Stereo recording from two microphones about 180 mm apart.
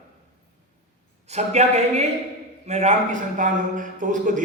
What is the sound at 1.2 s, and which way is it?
A man's voice, 40° right (ahead or behind).